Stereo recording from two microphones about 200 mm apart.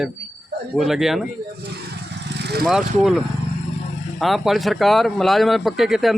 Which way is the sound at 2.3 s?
55° right (ahead or behind).